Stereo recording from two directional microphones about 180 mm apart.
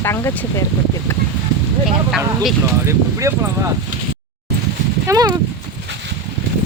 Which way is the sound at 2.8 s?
15° right (ahead or behind).